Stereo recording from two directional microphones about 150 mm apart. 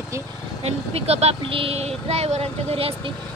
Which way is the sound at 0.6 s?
45° right (ahead or behind).